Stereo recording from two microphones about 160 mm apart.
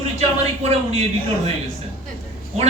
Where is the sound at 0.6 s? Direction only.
40° right (ahead or behind).